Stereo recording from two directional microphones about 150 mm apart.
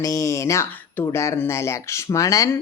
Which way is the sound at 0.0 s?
20° left (ahead or behind).